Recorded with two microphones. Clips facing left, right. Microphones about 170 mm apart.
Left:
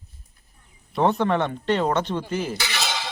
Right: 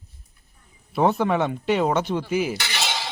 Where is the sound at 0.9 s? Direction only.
5° right (ahead or behind).